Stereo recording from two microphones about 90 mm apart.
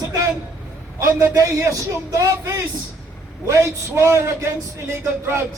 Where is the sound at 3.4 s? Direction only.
35° right (ahead or behind).